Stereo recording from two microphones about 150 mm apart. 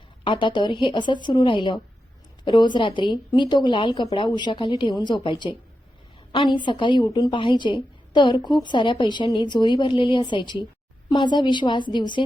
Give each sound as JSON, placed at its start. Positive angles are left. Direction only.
{"t": 0.3, "sound": "a woman's voice", "side_deg": 35}